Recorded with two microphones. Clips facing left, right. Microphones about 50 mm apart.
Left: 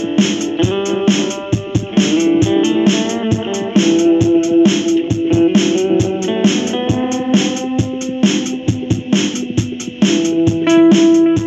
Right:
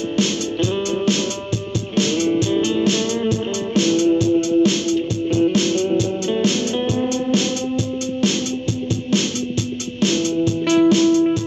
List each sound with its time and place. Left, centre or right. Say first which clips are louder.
0.1 s music: left 7 dB; left
9.9 s music: left 6 dB; left